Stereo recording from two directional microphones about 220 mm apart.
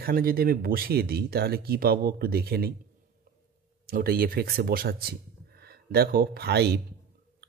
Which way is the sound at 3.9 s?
45° right (ahead or behind).